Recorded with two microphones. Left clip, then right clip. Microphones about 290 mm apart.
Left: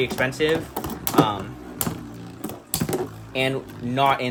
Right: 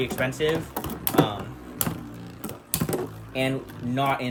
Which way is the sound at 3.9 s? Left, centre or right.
Left.